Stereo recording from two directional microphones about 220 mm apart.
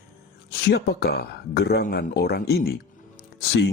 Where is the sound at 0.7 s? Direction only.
45° left (ahead or behind).